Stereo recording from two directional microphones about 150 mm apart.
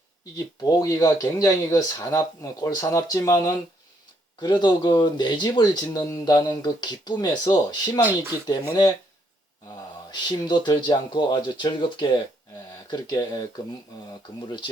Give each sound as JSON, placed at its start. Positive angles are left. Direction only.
{"t": 0.6, "sound": "speech", "side_deg": 25}
{"t": 8.0, "sound": "speech", "side_deg": -15}
{"t": 8.4, "sound": "speech", "side_deg": 25}
{"t": 10.1, "sound": "speech", "side_deg": 30}